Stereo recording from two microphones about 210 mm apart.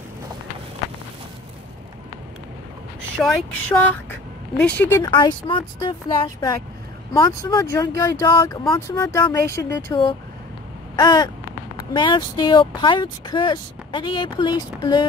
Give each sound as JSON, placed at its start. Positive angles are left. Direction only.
{"t": 3.2, "sound": "speech", "side_deg": 5}
{"t": 5.1, "sound": "speech", "side_deg": 25}
{"t": 11.0, "sound": "speech", "side_deg": 20}